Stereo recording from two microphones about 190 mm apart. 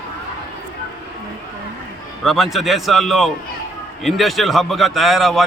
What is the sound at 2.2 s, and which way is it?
A man's voice, centre (ahead or behind).